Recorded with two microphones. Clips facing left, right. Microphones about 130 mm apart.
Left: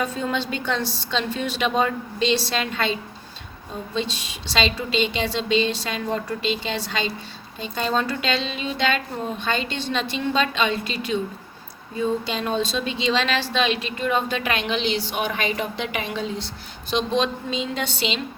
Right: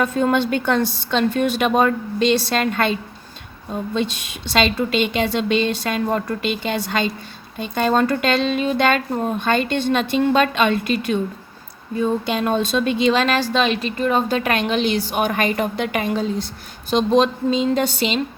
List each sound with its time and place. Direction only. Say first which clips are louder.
0.0 s a woman's voice: right 7 dB; 55° right (ahead or behind)
3.9 s a woman's voice: right 2 dB; 55° right (ahead or behind)